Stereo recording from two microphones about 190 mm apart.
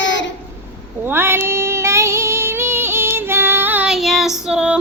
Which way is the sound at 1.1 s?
10° right (ahead or behind).